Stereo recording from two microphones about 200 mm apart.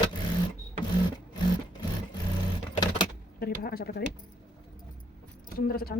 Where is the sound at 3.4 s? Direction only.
50° left (ahead or behind).